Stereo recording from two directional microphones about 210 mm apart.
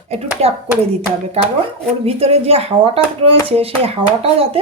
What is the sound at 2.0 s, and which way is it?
Speech, 30° right (ahead or behind).